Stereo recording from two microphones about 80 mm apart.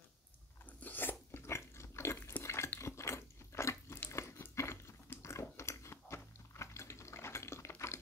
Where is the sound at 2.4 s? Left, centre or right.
Left.